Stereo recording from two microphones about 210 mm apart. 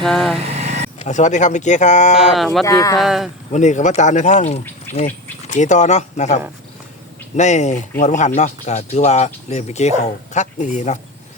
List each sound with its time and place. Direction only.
0.0 s speech: centre (ahead or behind)
0.3 s vehicle: 30° right (ahead or behind)
0.9 s speech: 35° left (ahead or behind)
2.3 s speech: centre (ahead or behind)
2.6 s speech: 15° left (ahead or behind)
3.0 s speech: centre (ahead or behind)
3.5 s speech: 35° left (ahead or behind)